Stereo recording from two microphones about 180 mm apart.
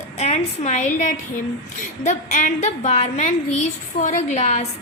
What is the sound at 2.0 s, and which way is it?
A woman's voice, 40° left (ahead or behind).